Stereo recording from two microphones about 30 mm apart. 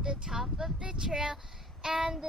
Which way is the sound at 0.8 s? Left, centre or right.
Centre.